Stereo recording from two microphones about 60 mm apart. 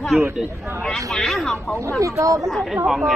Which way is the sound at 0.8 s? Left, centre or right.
Centre.